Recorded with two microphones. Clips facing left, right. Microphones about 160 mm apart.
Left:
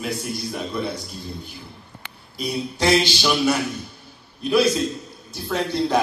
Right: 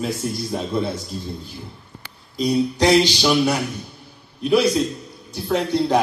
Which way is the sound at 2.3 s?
15° right (ahead or behind).